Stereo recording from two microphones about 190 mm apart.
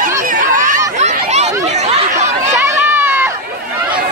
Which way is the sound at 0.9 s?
35° right (ahead or behind).